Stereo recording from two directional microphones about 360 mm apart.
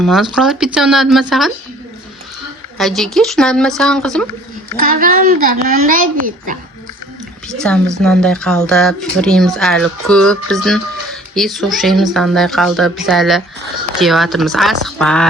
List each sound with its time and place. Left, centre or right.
0.0 s speech: centre
2.7 s speech: centre
4.8 s a child's voice: right
7.4 s speech: centre